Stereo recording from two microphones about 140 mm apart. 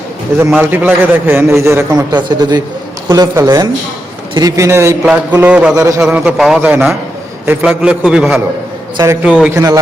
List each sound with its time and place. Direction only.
0.5 s a man's voice: 10° right (ahead or behind)